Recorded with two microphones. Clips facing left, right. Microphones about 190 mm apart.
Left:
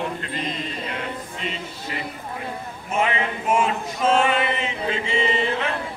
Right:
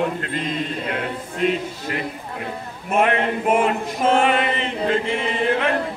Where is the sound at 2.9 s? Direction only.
60° right (ahead or behind).